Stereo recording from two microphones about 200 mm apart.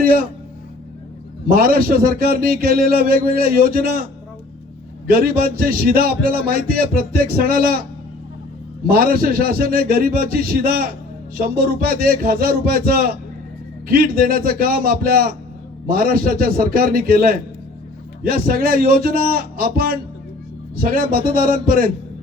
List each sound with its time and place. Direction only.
0.0 s speech: 45° right (ahead or behind)
1.5 s a man's voice: 50° right (ahead or behind)
5.0 s a man's voice: 45° right (ahead or behind)
8.9 s a man's voice: 45° right (ahead or behind)